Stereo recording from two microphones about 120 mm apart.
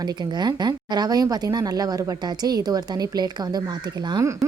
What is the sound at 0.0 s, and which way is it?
A woman's voice, 35° right (ahead or behind).